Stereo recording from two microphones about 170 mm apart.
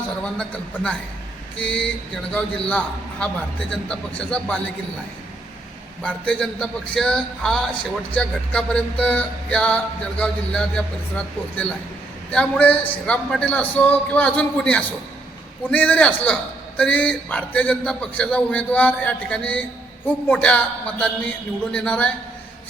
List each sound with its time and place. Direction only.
0.2 s a man's voice: 5° left (ahead or behind)
6.0 s a man's voice: 5° left (ahead or behind)
12.3 s a man's voice: 10° left (ahead or behind)